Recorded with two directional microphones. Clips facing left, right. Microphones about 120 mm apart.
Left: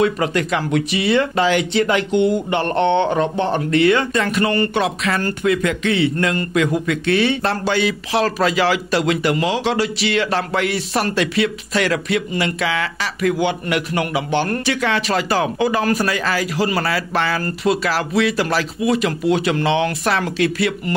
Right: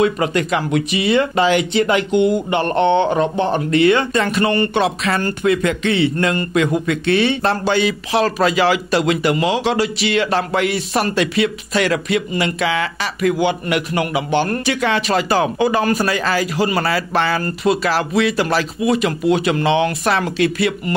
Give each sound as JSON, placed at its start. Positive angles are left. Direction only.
{"t": 0.0, "sound": "speech", "side_deg": -20}